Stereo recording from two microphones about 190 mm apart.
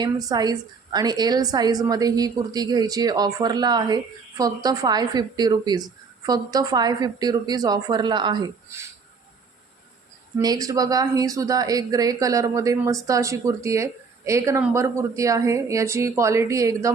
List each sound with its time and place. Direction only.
0.0 s a woman's voice: 20° right (ahead or behind)
10.3 s speech: 20° right (ahead or behind)